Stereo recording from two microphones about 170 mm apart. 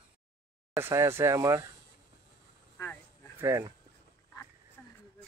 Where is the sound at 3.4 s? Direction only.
15° right (ahead or behind).